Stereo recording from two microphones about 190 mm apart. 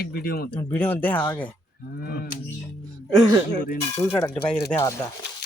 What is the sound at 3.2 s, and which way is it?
Speech, 20° right (ahead or behind).